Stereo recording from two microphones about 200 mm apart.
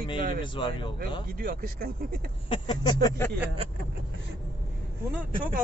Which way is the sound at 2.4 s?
25° left (ahead or behind).